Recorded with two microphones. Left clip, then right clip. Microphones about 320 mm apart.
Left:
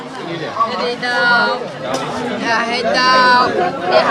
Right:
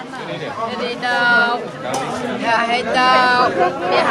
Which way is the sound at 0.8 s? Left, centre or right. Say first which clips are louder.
Left 2 dB; centre.